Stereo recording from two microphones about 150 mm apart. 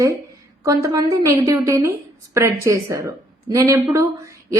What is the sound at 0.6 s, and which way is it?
Speech, 20° right (ahead or behind).